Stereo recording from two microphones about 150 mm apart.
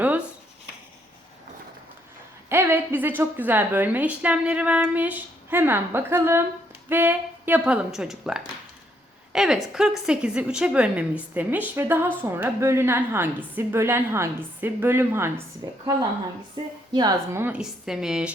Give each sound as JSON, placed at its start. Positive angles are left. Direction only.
{"t": 2.5, "sound": "a woman's voice", "side_deg": -15}
{"t": 17.3, "sound": "a woman's voice", "side_deg": -10}